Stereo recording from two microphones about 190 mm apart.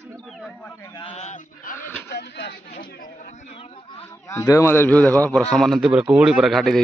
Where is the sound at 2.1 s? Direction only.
60° left (ahead or behind); by 4.0 s 30° left (ahead or behind).